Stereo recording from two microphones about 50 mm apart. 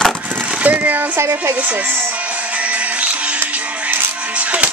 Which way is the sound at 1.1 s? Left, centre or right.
Right.